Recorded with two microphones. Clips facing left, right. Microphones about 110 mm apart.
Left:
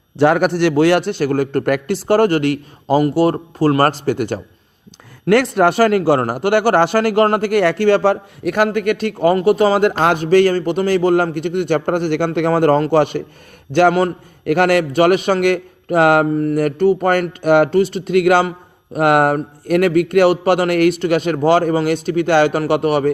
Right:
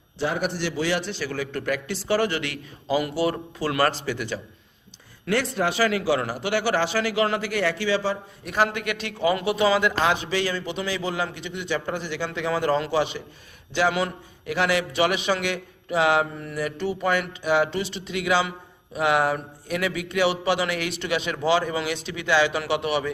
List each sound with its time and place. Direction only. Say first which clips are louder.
0.2 s a man's voice: left 13 dB; 70° left (ahead or behind); by 4.4 s 50° left (ahead or behind)
5.2 s a man's voice: left 11 dB; 65° left (ahead or behind)